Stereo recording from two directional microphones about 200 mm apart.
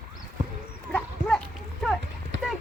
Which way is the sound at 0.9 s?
5° left (ahead or behind).